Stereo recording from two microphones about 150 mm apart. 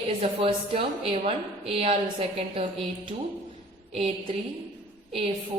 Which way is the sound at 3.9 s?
40° right (ahead or behind).